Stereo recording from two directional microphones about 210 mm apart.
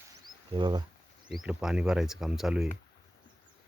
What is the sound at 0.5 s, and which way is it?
Speech, 20° right (ahead or behind).